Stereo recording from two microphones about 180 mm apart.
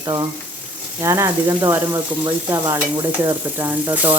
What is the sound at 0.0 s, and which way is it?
Speech, 20° right (ahead or behind).